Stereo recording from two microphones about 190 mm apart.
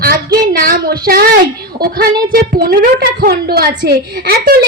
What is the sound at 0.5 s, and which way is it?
A woman's voice, 50° right (ahead or behind).